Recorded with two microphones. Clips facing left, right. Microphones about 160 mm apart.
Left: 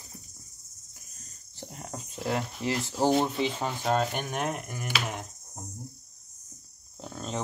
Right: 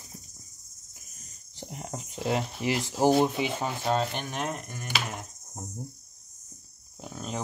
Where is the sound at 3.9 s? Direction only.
5° left (ahead or behind).